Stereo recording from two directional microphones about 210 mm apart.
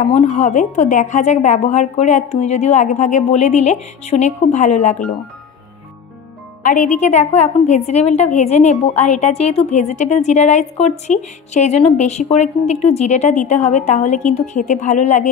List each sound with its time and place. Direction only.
0.1 s a woman's voice: 35° left (ahead or behind)
6.6 s a woman's voice: 35° left (ahead or behind)